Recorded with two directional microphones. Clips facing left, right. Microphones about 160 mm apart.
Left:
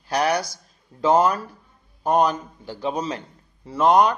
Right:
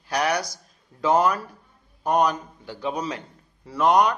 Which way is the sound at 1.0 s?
30° left (ahead or behind).